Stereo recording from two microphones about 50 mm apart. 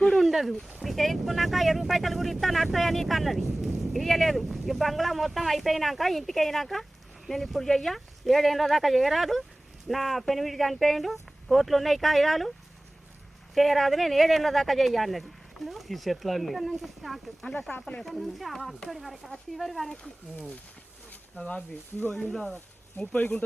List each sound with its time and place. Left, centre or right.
0.2 s a sound: centre
0.9 s speech: centre
13.5 s speech: centre
22.3 s speech: centre
23.1 s speech: left